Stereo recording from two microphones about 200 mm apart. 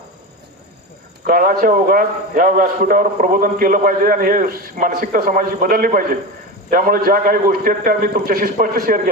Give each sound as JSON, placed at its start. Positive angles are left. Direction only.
{"t": 1.3, "sound": "a man's voice", "side_deg": -45}